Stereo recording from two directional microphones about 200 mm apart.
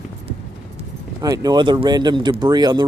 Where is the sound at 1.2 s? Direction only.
15° right (ahead or behind).